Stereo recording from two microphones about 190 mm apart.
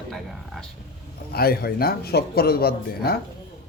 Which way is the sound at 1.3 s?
55° left (ahead or behind).